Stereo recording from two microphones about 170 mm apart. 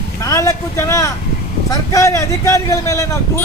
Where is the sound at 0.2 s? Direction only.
20° left (ahead or behind).